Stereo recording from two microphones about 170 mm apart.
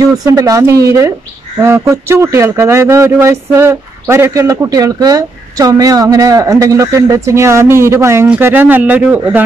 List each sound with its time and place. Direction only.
0.2 s speech: 20° right (ahead or behind)